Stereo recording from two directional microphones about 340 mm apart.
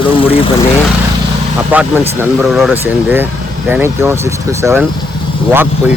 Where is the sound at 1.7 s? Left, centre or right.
Centre.